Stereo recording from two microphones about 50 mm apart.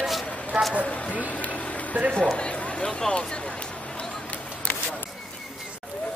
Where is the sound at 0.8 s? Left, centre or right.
Left.